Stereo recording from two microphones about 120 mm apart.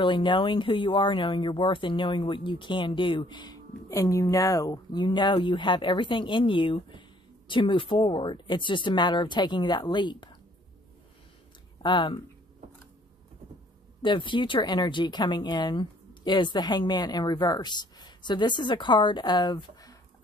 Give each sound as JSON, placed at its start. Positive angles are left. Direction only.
{"t": 0.0, "sound": "speech", "side_deg": 45}
{"t": 11.8, "sound": "speech", "side_deg": 40}
{"t": 14.0, "sound": "speech", "side_deg": 45}